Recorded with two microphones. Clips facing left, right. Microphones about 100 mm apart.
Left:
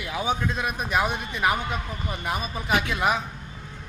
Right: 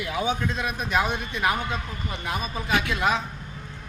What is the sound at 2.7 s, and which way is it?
Speech, 25° left (ahead or behind).